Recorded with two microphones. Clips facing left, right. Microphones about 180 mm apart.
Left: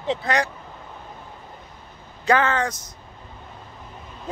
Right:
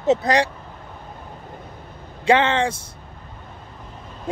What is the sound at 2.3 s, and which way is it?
Speech, 25° right (ahead or behind).